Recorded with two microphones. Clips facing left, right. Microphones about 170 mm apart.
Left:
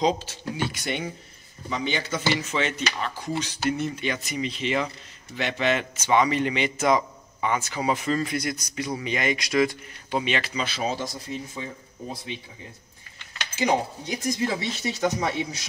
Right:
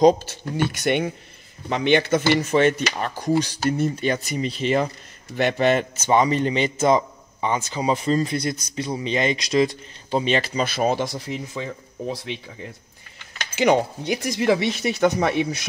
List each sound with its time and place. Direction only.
0.7 s speech: 60° right (ahead or behind); by 7.9 s 20° right (ahead or behind)
7.9 s speech: 30° right (ahead or behind)
10.9 s speech: 65° right (ahead or behind)
11.5 s speech: 80° right
13.6 s speech: 70° right (ahead or behind)